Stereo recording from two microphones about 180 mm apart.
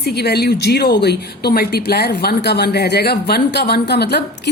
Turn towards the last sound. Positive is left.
turn(degrees=65)  # may be behind; listen again after turning